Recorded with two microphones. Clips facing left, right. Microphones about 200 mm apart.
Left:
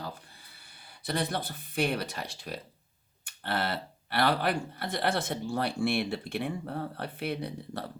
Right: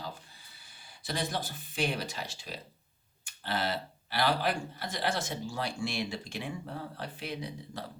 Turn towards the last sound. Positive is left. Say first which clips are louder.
# left 3 dB
turn(degrees=60)  # may be behind; listen again after turning